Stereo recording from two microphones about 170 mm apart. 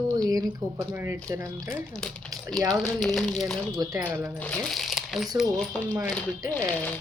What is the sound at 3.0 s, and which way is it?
Speech, centre (ahead or behind).